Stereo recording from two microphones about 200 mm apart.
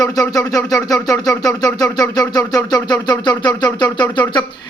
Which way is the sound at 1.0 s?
15° left (ahead or behind).